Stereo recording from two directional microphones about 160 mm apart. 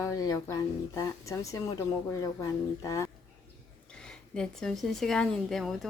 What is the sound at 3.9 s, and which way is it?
Speech, 5° left (ahead or behind).